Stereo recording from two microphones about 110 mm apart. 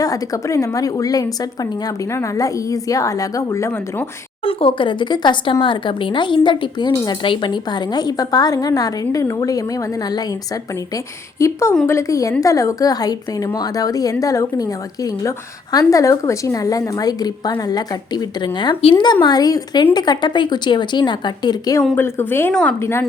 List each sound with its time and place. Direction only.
0.0 s a woman's voice: 30° left (ahead or behind)
4.4 s a woman's voice: 50° left (ahead or behind); by 21.8 s 35° left (ahead or behind)
21.9 s speech: 20° left (ahead or behind)